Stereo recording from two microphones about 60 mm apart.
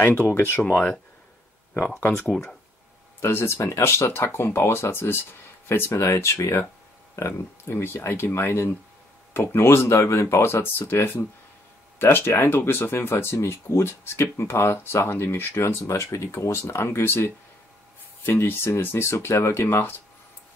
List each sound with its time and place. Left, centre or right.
0.0 s speech: left
2.0 s speech: left
5.9 s speech: left
10.4 s speech: left